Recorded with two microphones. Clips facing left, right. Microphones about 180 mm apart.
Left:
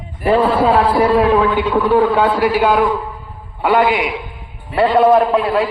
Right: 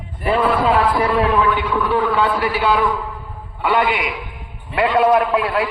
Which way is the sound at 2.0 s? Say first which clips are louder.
Left 4 dB; 45° left (ahead or behind).